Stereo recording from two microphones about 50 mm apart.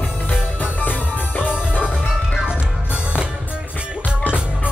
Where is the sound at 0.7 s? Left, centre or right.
Left.